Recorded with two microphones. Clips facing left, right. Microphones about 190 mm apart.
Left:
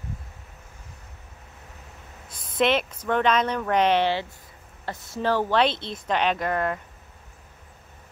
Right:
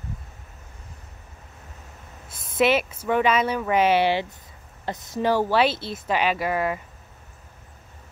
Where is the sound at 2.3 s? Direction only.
25° right (ahead or behind).